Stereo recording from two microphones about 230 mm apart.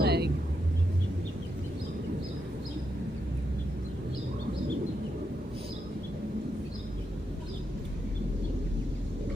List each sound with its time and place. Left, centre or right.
0.0 s vehicle: right